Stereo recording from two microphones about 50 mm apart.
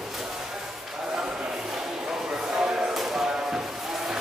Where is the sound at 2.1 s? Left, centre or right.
Centre.